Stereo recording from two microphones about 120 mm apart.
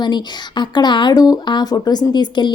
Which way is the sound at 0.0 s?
40° left (ahead or behind).